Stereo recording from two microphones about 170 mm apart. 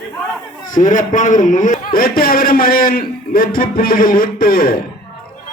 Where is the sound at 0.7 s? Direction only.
50° left (ahead or behind).